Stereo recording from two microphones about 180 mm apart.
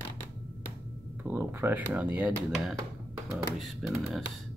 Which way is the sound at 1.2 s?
15° right (ahead or behind).